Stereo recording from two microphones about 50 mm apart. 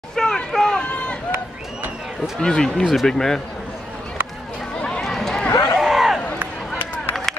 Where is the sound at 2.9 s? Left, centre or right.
Centre.